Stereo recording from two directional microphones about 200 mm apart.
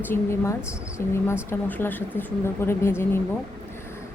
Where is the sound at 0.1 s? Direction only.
15° left (ahead or behind).